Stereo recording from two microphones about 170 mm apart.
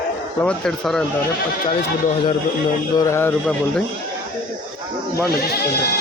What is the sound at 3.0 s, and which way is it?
Speech, 15° left (ahead or behind).